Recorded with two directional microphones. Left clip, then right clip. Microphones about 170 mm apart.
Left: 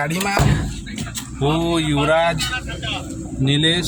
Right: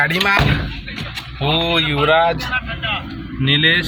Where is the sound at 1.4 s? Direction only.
20° left (ahead or behind).